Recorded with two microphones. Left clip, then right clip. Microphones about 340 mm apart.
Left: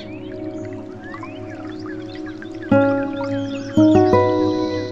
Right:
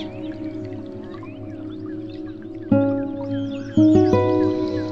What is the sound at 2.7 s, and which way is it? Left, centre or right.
Music, left.